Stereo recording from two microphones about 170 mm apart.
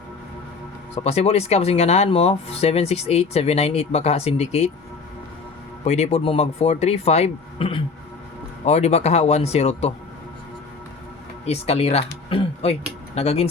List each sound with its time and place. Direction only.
0.9 s speech: 40° left (ahead or behind)
5.8 s speech: 40° left (ahead or behind)
11.4 s speech: 35° left (ahead or behind)